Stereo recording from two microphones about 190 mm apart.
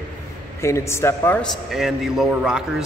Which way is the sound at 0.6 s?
15° left (ahead or behind).